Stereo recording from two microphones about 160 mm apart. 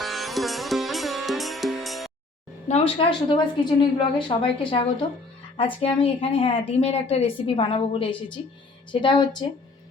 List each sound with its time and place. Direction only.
0.0 s sitar: centre (ahead or behind)
2.6 s a woman's voice: 40° left (ahead or behind)